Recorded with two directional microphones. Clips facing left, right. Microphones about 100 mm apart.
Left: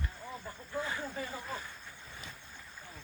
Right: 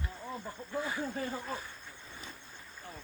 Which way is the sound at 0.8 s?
10° right (ahead or behind).